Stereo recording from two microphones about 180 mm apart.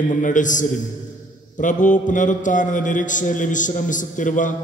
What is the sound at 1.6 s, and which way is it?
A man's voice, 45° left (ahead or behind).